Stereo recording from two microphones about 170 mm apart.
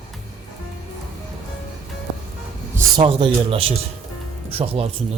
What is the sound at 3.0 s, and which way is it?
Speech, 30° right (ahead or behind).